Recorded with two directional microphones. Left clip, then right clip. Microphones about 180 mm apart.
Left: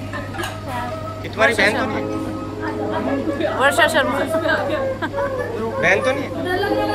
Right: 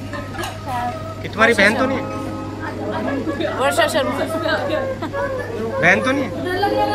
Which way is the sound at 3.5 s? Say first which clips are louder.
Left 2 dB; 15° left (ahead or behind).